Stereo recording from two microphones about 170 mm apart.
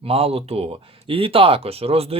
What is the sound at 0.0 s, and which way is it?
Speech, 35° right (ahead or behind).